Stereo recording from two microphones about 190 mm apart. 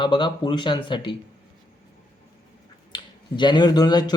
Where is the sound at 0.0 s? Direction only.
25° left (ahead or behind).